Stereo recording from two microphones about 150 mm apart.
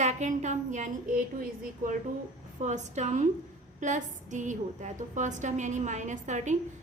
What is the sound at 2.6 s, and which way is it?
A woman's voice, 50° right (ahead or behind).